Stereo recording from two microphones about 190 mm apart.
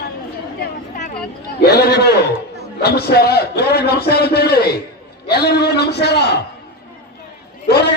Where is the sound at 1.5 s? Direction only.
55° left (ahead or behind).